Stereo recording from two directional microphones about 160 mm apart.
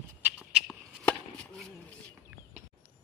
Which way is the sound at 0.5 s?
5° left (ahead or behind).